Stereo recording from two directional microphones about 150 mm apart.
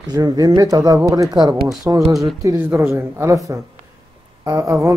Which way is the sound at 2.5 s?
15° right (ahead or behind).